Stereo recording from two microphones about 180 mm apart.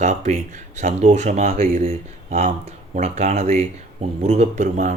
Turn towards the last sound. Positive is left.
turn(degrees=-40)  # may be behind; listen again after turning